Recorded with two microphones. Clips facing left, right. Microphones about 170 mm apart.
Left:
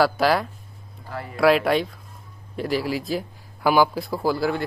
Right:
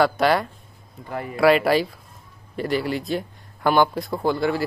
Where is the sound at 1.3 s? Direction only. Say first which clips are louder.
Right 1 dB; centre (ahead or behind).